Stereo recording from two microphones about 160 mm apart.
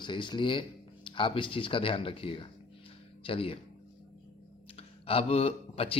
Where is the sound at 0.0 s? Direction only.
30° left (ahead or behind).